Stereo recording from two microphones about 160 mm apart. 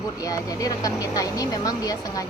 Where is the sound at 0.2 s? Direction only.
20° left (ahead or behind).